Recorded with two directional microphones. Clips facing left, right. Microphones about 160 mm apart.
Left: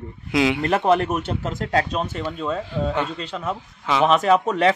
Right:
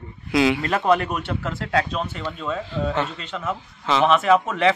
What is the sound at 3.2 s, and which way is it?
Speech, 35° left (ahead or behind).